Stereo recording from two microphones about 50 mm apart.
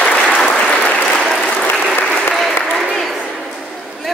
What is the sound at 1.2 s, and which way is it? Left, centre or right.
Applause, centre.